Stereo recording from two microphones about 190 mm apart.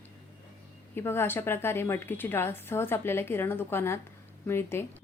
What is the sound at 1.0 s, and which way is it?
A woman's voice, 10° left (ahead or behind).